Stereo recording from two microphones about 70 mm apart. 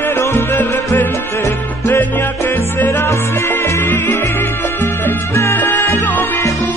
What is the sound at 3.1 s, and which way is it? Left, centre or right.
Music, left.